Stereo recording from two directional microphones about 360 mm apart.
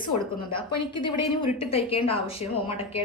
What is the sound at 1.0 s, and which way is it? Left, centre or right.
A woman's voice, centre.